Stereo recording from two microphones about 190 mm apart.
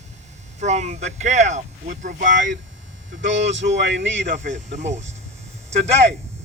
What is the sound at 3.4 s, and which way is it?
Speech, 70° right (ahead or behind).